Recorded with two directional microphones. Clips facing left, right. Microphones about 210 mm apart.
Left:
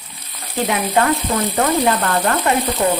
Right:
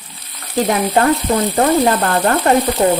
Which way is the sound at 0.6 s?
40° right (ahead or behind).